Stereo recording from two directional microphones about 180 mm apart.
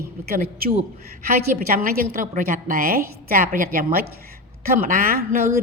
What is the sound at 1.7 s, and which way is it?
A woman's voice, 55° right (ahead or behind).